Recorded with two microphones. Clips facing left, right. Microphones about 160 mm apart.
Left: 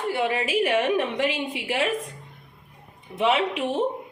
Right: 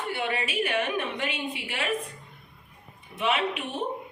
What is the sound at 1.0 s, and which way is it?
Speech, 90° left.